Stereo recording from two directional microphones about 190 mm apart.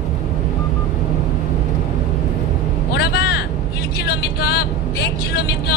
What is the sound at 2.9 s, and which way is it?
Vehicle, 60° left (ahead or behind).